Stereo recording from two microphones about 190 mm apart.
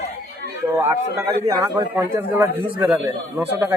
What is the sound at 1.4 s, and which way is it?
A man's voice, 15° right (ahead or behind).